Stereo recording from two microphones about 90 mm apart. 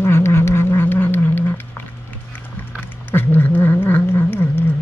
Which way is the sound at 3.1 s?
20° left (ahead or behind).